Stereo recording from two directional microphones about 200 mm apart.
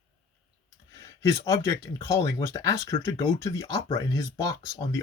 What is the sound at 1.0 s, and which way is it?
Speech, 15° left (ahead or behind).